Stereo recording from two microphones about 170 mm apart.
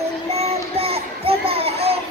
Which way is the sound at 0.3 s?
35° right (ahead or behind).